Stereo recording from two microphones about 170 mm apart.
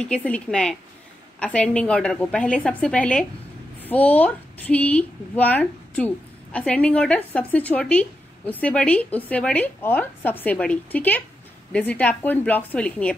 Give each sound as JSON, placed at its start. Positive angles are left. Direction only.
{"t": 0.0, "sound": "a woman's voice", "side_deg": 5}